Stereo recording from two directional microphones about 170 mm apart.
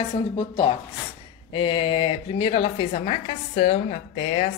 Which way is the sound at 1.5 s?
30° left (ahead or behind).